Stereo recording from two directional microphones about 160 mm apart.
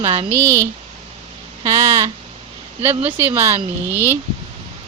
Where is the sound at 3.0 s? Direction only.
10° right (ahead or behind).